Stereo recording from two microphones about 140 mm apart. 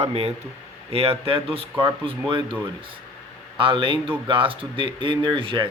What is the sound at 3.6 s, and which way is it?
Speech, 35° right (ahead or behind).